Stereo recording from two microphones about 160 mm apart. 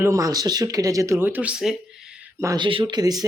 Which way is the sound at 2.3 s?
20° right (ahead or behind).